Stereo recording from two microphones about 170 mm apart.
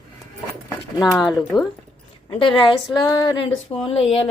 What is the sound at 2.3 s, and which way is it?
Speech, 30° left (ahead or behind).